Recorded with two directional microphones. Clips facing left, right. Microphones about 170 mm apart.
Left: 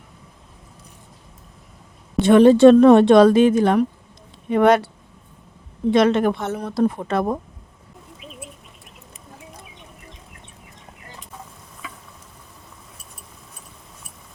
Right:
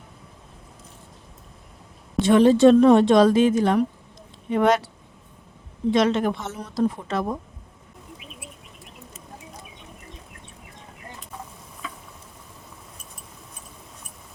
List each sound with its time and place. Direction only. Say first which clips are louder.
2.2 s speech: left 4 dB; 60° left (ahead or behind)
5.9 s speech: left 4 dB; 60° left (ahead or behind)